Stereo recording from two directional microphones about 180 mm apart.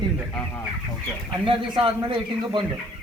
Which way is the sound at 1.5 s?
30° right (ahead or behind).